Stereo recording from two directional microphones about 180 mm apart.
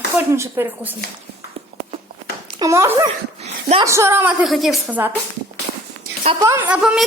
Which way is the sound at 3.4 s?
35° right (ahead or behind).